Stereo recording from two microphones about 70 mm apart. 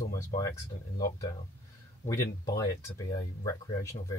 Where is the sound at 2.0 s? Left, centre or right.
Left.